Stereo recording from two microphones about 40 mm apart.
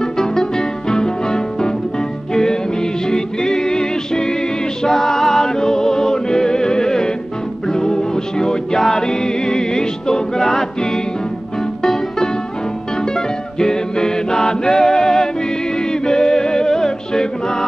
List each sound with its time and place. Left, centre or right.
0.0 s music: centre
8.7 s music: centre
9.0 s music: centre